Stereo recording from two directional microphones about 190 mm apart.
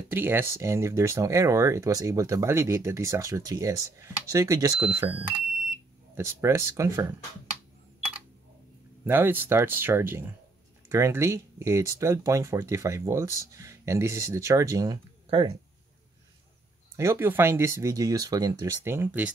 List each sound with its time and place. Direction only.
0.1 s speech: 10° right (ahead or behind)
9.0 s speech: 10° right (ahead or behind)
15.2 s speech: 30° right (ahead or behind)
16.9 s speech: 15° right (ahead or behind)